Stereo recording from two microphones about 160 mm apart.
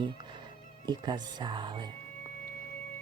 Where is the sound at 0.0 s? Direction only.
30° right (ahead or behind).